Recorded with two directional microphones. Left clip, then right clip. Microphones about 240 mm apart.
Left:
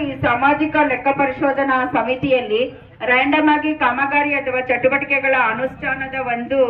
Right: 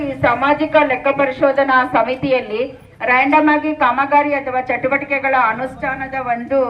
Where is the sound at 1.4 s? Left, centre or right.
Centre.